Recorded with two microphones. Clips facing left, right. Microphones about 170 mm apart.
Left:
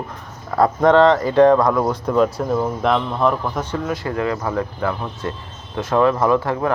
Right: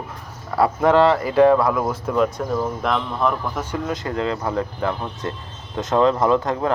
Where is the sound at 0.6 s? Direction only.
5° right (ahead or behind).